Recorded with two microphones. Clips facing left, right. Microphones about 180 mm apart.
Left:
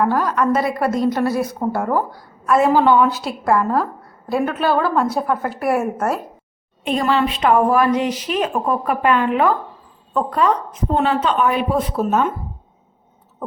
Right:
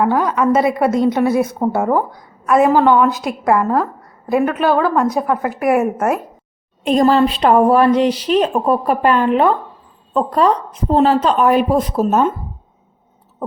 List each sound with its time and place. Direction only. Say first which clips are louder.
0.0 s a woman's voice: right 3 dB; centre (ahead or behind)
1.6 s speech: right 4 dB; 15° right (ahead or behind)
2.5 s a woman's voice: right 2 dB; centre (ahead or behind)
6.8 s a woman's voice: right 6 dB; 40° right (ahead or behind)